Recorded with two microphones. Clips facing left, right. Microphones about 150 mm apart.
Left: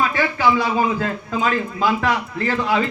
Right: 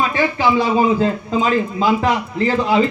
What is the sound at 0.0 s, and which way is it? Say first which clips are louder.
A man's voice: right 1 dB; 20° right (ahead or behind).